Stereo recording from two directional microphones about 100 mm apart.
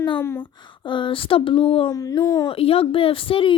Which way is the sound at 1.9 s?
35° left (ahead or behind).